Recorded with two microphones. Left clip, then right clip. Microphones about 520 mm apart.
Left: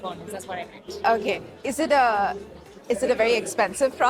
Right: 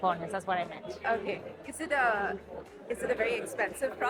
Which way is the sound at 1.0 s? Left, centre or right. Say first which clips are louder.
Left 10 dB; left.